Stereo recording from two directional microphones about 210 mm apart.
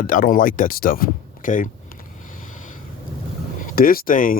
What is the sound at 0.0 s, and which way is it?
Speech, 40° left (ahead or behind).